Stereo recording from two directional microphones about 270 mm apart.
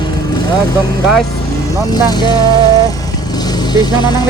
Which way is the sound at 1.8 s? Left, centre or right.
Centre.